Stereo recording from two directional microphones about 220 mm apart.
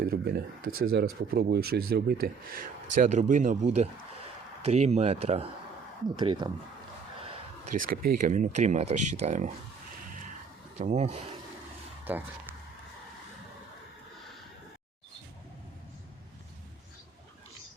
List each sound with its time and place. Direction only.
0.0 s speech: 45° right (ahead or behind); by 6.5 s 20° right (ahead or behind)
7.6 s speech: 35° right (ahead or behind)
10.8 s speech: 30° right (ahead or behind)
12.1 s speech: 5° right (ahead or behind)